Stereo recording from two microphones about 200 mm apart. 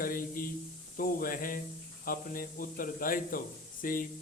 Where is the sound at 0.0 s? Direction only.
45° left (ahead or behind).